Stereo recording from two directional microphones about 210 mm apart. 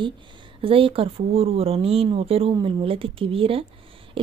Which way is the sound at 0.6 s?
25° right (ahead or behind).